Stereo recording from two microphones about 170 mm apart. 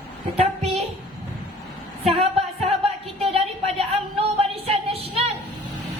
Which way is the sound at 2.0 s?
35° right (ahead or behind).